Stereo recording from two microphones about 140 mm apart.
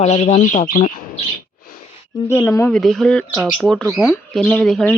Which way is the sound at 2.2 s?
15° left (ahead or behind).